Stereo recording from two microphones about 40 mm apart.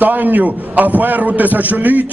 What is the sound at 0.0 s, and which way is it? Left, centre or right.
A man's voice, right.